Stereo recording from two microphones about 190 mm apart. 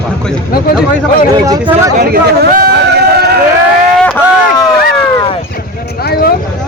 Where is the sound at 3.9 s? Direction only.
5° left (ahead or behind).